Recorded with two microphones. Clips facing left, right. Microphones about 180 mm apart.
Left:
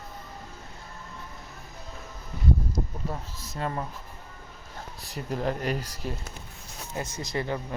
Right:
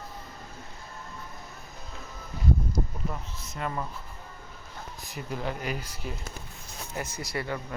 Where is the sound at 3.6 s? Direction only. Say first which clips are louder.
Left 2 dB; 30° left (ahead or behind).